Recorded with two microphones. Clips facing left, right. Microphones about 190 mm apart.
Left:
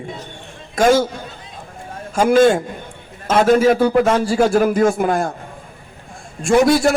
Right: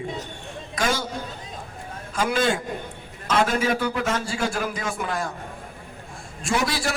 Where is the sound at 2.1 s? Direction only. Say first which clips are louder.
Left 11 dB; 45° left (ahead or behind).